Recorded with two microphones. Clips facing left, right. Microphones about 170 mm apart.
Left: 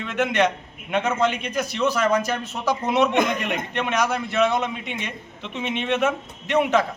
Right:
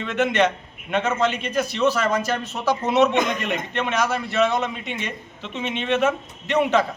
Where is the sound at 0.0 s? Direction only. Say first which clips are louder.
Right 1 dB; 10° left (ahead or behind).